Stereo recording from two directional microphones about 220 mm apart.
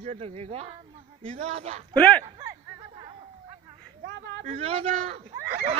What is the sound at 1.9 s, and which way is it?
Speech, 5° left (ahead or behind).